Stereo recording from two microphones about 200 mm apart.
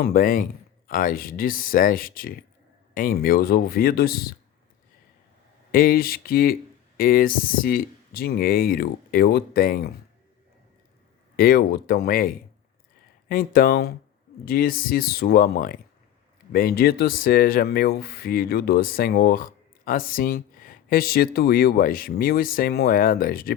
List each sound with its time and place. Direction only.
0.0 s speech: 45° left (ahead or behind)
5.7 s speech: 45° left (ahead or behind)
11.3 s speech: 50° left (ahead or behind)